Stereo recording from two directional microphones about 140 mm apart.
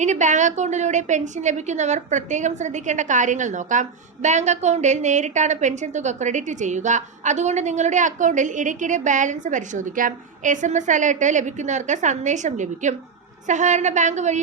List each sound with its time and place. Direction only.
0.0 s a woman's voice: 60° right (ahead or behind)